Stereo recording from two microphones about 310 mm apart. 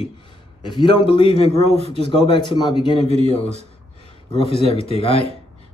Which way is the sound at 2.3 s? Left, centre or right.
Centre.